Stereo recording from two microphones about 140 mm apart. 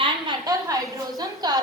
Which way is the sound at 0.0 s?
30° right (ahead or behind).